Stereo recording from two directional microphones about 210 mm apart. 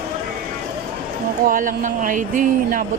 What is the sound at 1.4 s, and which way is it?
Speech, 40° right (ahead or behind).